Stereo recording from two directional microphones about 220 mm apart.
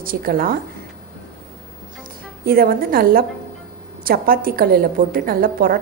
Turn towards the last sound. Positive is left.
turn(degrees=-40)  # may be behind; listen again after turning